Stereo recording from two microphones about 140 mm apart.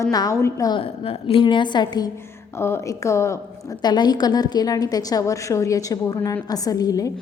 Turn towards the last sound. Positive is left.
turn(degrees=25)  # may be behind; listen again after turning